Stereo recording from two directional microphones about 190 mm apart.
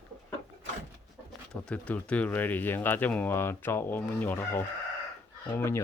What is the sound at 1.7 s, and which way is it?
Speech, 5° left (ahead or behind).